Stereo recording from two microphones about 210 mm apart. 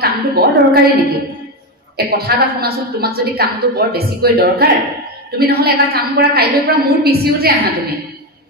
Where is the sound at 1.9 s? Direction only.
50° right (ahead or behind).